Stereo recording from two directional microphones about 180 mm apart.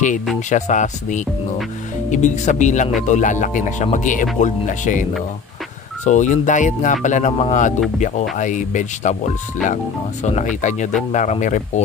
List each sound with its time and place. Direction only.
0.5 s speech: 40° left (ahead or behind)
6.0 s speech: 40° left (ahead or behind)
10.2 s speech: 40° left (ahead or behind)